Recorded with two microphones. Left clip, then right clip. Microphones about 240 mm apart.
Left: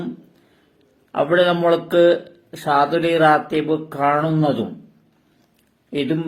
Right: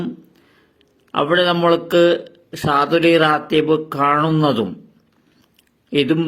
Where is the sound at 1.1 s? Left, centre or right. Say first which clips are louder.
Even; right.